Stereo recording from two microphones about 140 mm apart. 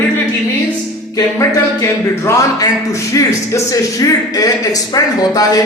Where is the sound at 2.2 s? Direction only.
20° left (ahead or behind).